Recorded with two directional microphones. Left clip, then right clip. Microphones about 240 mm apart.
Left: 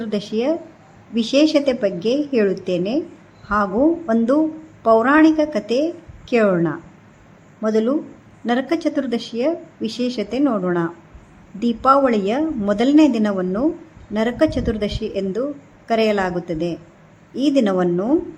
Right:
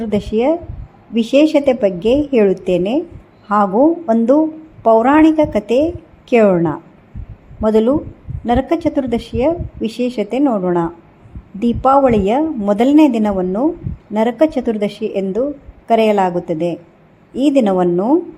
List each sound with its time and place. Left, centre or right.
0.0 s speech: centre